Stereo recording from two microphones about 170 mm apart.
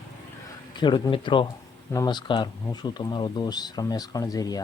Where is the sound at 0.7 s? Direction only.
25° left (ahead or behind).